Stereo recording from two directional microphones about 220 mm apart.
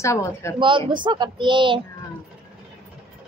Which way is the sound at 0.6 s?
20° right (ahead or behind).